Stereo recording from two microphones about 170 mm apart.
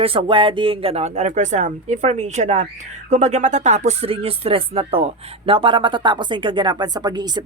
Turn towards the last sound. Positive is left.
turn(degrees=-25)  # may be behind; listen again after turning